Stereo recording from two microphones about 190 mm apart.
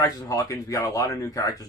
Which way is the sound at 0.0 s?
20° left (ahead or behind).